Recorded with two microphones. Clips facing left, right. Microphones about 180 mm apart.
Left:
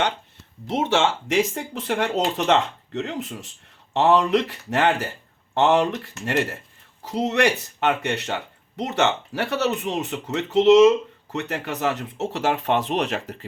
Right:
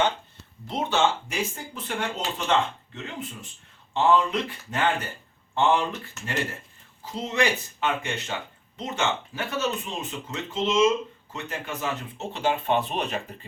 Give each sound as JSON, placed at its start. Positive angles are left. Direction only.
{"t": 0.7, "sound": "speech", "side_deg": 85}